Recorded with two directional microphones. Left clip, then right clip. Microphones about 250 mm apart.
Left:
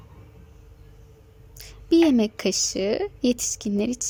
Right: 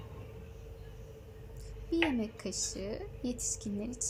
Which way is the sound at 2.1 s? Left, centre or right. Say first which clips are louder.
Left 14 dB; left.